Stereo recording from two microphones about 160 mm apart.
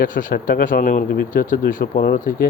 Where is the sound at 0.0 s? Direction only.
55° left (ahead or behind).